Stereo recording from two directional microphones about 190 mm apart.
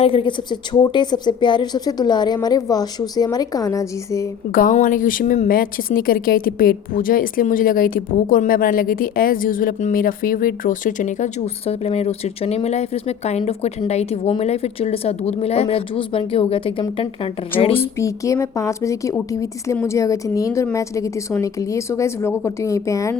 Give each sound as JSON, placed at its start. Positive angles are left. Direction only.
{"t": 0.0, "sound": "a woman's voice", "side_deg": 30}
{"t": 4.7, "sound": "a woman's voice", "side_deg": 45}
{"t": 17.7, "sound": "a woman's voice", "side_deg": 15}